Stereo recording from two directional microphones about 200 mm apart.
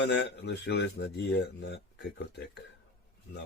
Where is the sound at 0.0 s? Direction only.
60° left (ahead or behind).